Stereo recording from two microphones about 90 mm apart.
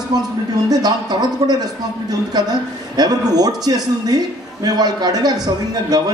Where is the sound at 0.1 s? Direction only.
45° right (ahead or behind).